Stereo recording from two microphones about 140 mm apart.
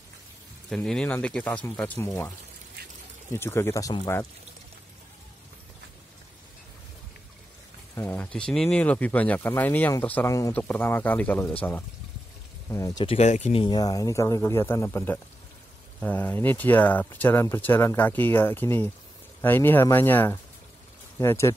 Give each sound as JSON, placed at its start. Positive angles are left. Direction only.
{"t": 0.7, "sound": "speech", "side_deg": 5}
{"t": 3.3, "sound": "a man's voice", "side_deg": 15}
{"t": 7.9, "sound": "speech", "side_deg": 15}
{"t": 12.6, "sound": "speech", "side_deg": 25}
{"t": 13.0, "sound": "speech", "side_deg": 50}
{"t": 13.6, "sound": "a man's voice", "side_deg": 30}